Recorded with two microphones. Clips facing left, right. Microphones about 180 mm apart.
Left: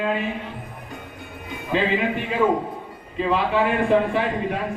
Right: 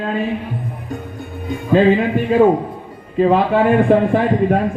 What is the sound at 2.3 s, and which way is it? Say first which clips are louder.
A man's voice: right 9 dB; 45° right (ahead or behind).